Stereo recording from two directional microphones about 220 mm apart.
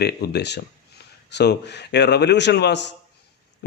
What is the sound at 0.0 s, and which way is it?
A man's voice, 45° left (ahead or behind).